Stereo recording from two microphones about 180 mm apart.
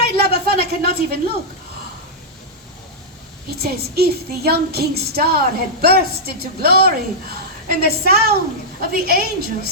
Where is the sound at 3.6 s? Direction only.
60° right (ahead or behind).